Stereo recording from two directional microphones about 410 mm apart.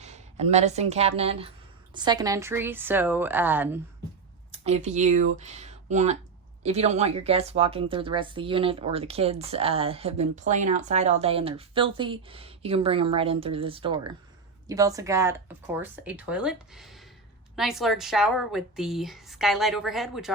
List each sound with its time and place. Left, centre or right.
0.0 s speech: centre
4.6 s a woman's voice: centre